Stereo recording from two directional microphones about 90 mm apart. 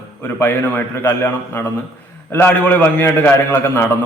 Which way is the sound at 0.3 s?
20° left (ahead or behind).